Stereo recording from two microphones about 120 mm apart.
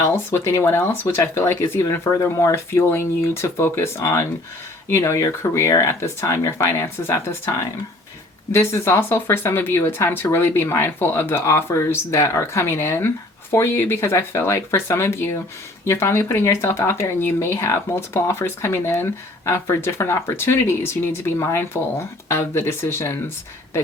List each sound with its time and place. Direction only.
0.0 s speech: 20° left (ahead or behind)
8.5 s speech: 25° left (ahead or behind)